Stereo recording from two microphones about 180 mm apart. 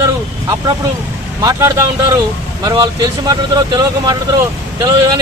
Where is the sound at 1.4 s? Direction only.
20° right (ahead or behind).